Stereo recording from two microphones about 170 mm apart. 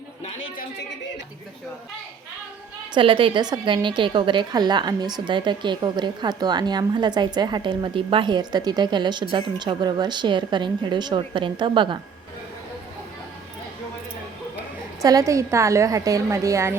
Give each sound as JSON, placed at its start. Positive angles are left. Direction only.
{"t": 0.3, "sound": "a woman's voice", "side_deg": 75}
{"t": 2.9, "sound": "a woman's voice", "side_deg": -30}
{"t": 15.0, "sound": "a woman's voice", "side_deg": -20}